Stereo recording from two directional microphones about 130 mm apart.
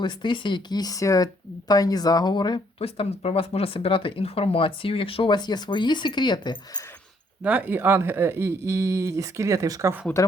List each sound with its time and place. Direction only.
0.0 s speech: 35° left (ahead or behind)
2.7 s speech: 50° left (ahead or behind); by 6.8 s 35° left (ahead or behind)
7.4 s speech: 10° right (ahead or behind)